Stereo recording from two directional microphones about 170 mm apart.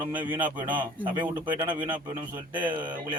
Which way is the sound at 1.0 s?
30° right (ahead or behind).